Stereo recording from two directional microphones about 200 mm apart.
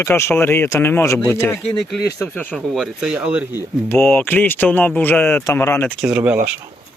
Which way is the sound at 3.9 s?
10° left (ahead or behind).